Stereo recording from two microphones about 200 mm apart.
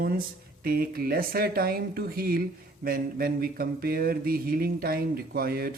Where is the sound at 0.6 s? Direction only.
50° right (ahead or behind).